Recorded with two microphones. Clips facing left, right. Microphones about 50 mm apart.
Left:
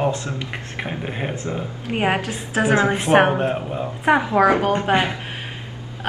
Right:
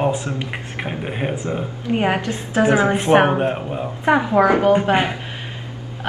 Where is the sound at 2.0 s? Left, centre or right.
Centre.